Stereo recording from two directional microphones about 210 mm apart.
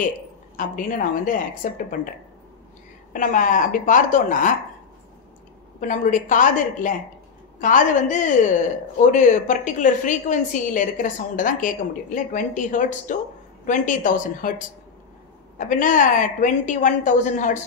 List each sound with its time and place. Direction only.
0.6 s speech: 40° left (ahead or behind)
5.8 s speech: 40° left (ahead or behind)
15.5 s speech: 40° left (ahead or behind)